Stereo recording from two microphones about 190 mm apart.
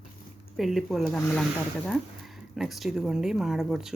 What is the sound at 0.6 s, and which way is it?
Speech, centre (ahead or behind).